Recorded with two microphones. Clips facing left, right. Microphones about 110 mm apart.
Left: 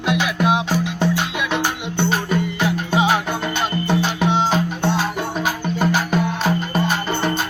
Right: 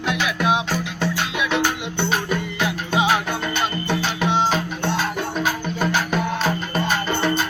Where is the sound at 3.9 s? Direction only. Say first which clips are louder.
Left 6 dB; 25° left (ahead or behind).